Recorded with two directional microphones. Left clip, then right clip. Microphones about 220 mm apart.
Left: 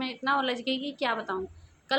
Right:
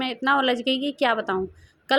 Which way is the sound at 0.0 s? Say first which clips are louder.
Right 6 dB; 30° right (ahead or behind).